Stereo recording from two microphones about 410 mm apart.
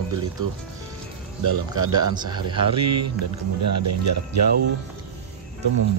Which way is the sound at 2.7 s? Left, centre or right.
Right.